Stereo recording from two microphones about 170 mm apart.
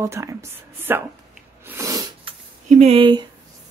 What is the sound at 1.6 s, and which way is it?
Sneeze, 15° right (ahead or behind).